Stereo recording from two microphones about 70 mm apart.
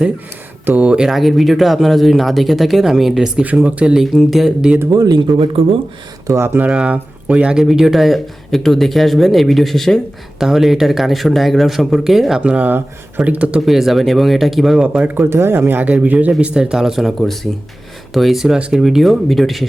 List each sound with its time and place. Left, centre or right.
0.6 s speech: right
1.0 s speech: centre
3.4 s speech: right
4.0 s speech: centre
4.9 s speech: right
6.4 s speech: right
6.7 s speech: centre
12.4 s speech: centre
13.7 s speech: centre
14.9 s speech: right
15.3 s speech: right; by 19.6 s centre